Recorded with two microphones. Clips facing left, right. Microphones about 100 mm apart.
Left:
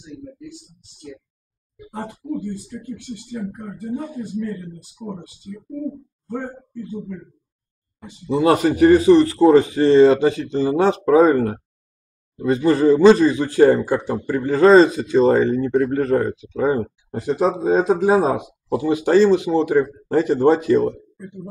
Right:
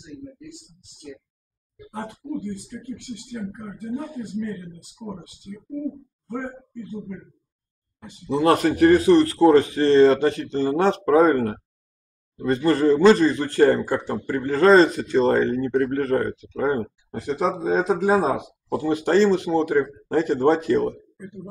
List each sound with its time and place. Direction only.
1.9 s speech: 10° left (ahead or behind)